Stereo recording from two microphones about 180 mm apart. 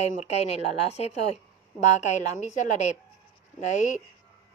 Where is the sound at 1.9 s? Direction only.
40° left (ahead or behind).